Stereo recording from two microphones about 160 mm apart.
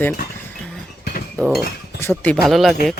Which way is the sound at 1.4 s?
10° left (ahead or behind).